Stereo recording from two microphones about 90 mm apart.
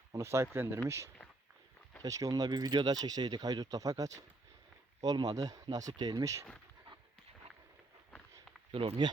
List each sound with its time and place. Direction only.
0.1 s speech: 30° right (ahead or behind)
8.7 s speech: 80° right